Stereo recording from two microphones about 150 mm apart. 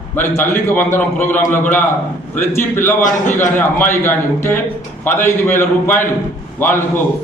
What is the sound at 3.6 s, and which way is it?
A man's voice, 15° left (ahead or behind).